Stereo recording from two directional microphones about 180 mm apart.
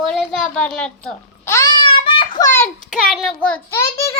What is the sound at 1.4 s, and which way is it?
Babbling, 15° left (ahead or behind).